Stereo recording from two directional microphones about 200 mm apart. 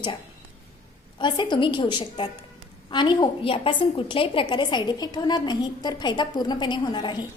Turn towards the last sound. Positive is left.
turn(degrees=20)  # may be behind; listen again after turning